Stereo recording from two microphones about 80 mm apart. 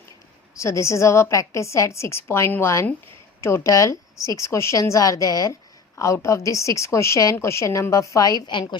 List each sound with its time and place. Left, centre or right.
0.6 s a woman's voice: left